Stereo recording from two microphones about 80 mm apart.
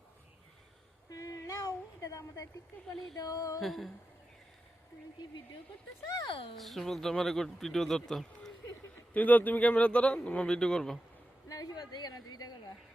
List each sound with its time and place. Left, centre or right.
1.1 s a sound: left
3.6 s speech: centre
6.2 s speech: left
6.6 s speech: centre
9.1 s speech: left
11.4 s a woman's voice: left